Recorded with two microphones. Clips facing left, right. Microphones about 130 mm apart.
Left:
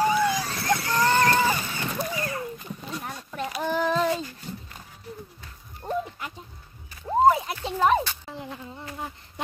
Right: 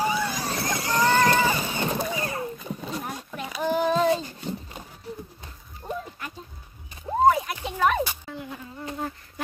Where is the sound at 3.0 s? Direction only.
10° right (ahead or behind).